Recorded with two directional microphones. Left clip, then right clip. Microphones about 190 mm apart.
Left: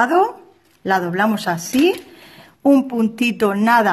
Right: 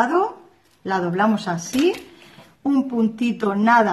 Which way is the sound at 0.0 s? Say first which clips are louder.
Left 4 dB; 45° left (ahead or behind).